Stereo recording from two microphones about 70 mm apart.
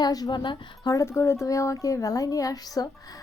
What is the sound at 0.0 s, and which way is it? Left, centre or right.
Speech, left.